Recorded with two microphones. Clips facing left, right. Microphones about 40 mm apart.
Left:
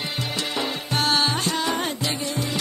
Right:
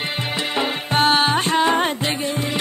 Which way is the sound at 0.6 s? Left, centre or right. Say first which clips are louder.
Right 7 dB; right.